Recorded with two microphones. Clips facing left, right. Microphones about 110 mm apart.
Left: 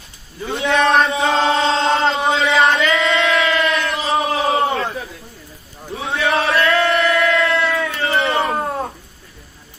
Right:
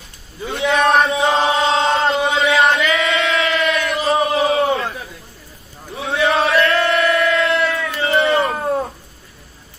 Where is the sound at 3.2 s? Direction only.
Centre (ahead or behind).